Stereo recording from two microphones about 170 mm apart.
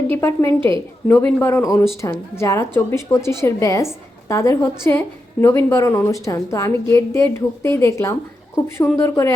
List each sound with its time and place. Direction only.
0.1 s a woman's voice: 15° left (ahead or behind)